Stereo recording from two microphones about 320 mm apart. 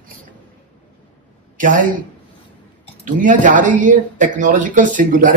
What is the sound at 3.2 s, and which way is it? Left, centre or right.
Speech, right.